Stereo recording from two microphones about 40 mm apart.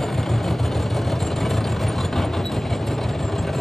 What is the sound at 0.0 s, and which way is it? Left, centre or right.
Vehicle, centre.